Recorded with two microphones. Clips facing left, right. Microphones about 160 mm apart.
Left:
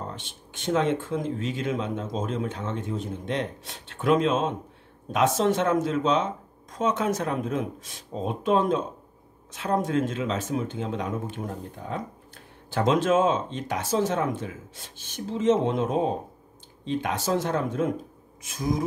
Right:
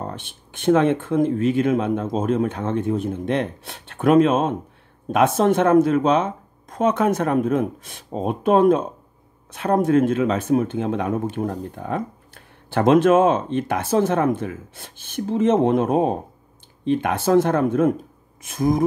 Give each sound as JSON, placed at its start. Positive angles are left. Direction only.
{"t": 0.0, "sound": "speech", "side_deg": -55}